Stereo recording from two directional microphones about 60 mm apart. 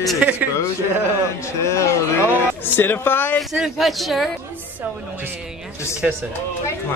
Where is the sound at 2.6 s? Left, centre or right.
Left.